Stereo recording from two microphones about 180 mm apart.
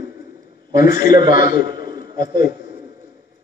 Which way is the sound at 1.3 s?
50° left (ahead or behind).